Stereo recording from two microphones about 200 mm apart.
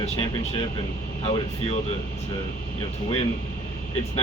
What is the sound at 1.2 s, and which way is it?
Speech, 30° left (ahead or behind).